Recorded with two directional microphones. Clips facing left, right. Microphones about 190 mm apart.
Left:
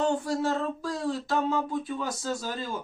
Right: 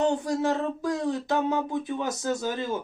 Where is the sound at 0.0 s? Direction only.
20° right (ahead or behind).